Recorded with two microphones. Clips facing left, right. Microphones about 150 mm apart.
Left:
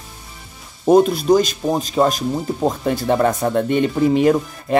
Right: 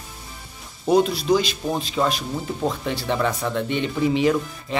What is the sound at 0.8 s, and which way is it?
Speech, 50° left (ahead or behind).